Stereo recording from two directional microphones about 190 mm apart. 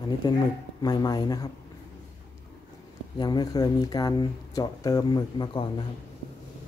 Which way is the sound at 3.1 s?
20° left (ahead or behind).